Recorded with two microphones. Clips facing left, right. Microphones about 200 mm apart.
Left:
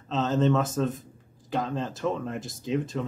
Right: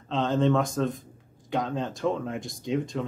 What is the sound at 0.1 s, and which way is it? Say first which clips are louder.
Speech: even; 5° left (ahead or behind).